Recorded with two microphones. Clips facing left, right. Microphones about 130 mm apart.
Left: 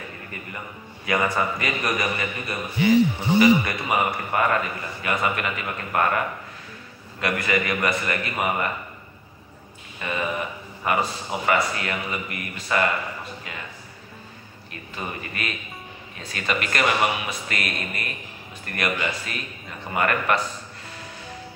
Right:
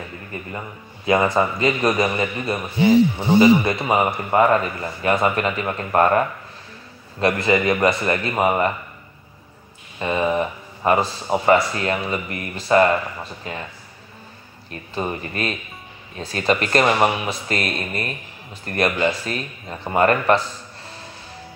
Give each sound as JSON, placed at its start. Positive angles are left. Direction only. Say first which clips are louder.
{"t": 0.3, "sound": "a man's voice", "louder": "right 8 dB", "side_deg": -25}
{"t": 2.0, "sound": "speech", "louder": "right 6 dB", "side_deg": -35}
{"t": 2.5, "sound": "a man's voice", "louder": "right 3 dB", "side_deg": -15}
{"t": 9.9, "sound": "a man's voice", "louder": "right 7 dB", "side_deg": -30}
{"t": 14.7, "sound": "speech", "louder": "right 7 dB", "side_deg": -35}